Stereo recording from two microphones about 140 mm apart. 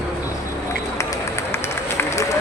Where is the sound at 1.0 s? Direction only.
20° left (ahead or behind).